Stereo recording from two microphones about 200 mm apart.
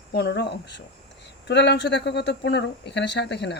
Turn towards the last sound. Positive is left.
turn(degrees=60)  # may be behind; listen again after turning